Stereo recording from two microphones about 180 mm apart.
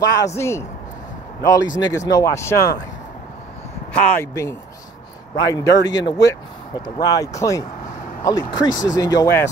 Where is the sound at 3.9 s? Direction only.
10° left (ahead or behind).